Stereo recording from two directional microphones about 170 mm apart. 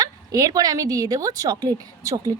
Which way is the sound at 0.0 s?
20° right (ahead or behind).